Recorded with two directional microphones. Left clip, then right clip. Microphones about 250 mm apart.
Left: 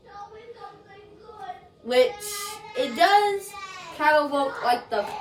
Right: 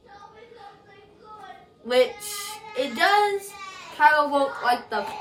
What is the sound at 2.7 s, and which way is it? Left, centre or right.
Female singing, centre.